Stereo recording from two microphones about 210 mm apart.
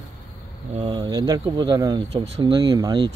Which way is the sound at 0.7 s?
20° right (ahead or behind).